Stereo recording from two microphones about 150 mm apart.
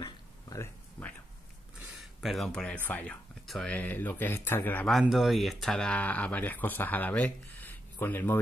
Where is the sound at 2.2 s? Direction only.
Centre (ahead or behind).